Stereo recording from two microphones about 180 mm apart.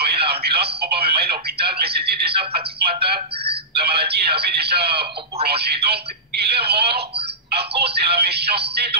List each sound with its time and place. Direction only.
0.0 s speech: 65° right (ahead or behind)
7.5 s music: 65° right (ahead or behind)